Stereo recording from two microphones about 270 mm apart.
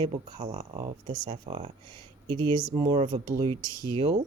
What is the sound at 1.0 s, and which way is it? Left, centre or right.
Speech, right.